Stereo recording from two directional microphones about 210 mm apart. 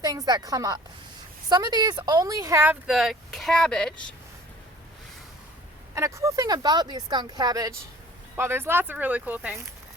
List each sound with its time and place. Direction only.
0.0 s speech: 15° right (ahead or behind); by 4.1 s 5° left (ahead or behind)
5.9 s speech: 15° right (ahead or behind)